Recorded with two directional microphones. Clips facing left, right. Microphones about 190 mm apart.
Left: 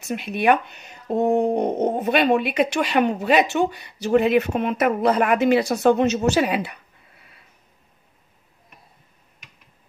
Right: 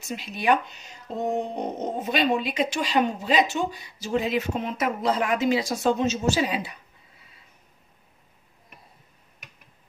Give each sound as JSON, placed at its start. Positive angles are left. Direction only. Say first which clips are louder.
{"t": 0.0, "sound": "speech", "louder": "left 6 dB", "side_deg": 60}